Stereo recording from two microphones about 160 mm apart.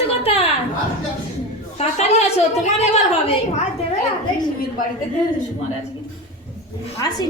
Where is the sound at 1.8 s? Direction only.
40° left (ahead or behind).